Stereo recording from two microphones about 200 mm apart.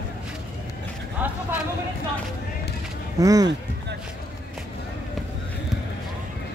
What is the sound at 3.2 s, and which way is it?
Speech, 20° right (ahead or behind).